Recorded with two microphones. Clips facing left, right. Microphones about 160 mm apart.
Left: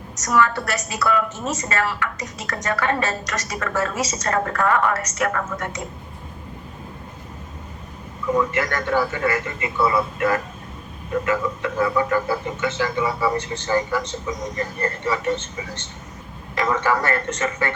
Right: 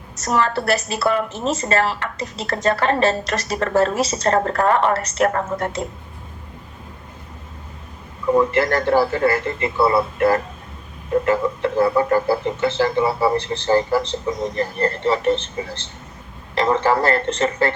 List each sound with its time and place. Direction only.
0.3 s a woman's voice: 30° right (ahead or behind)
8.4 s speech: 30° right (ahead or behind)